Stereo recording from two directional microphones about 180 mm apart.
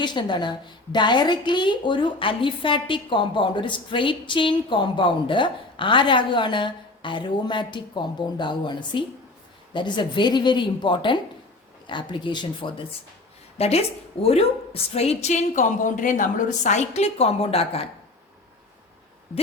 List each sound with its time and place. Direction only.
0.0 s a woman's voice: 25° left (ahead or behind)